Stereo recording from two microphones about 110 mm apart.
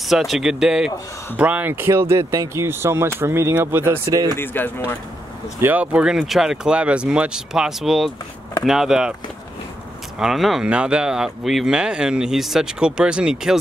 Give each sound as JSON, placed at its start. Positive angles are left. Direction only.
{"t": 0.0, "sound": "speech", "side_deg": -5}
{"t": 4.0, "sound": "speech", "side_deg": -35}
{"t": 4.4, "sound": "speech", "side_deg": 20}
{"t": 5.6, "sound": "speech", "side_deg": -15}
{"t": 10.1, "sound": "speech", "side_deg": -5}